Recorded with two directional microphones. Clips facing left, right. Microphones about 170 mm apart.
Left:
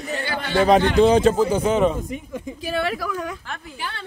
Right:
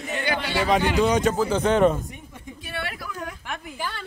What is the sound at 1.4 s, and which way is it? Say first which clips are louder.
Speech: even; 10° left (ahead or behind).